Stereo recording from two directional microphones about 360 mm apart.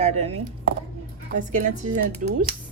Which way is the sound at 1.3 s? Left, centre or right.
Centre.